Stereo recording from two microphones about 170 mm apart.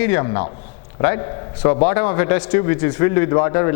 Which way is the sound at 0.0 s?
15° left (ahead or behind).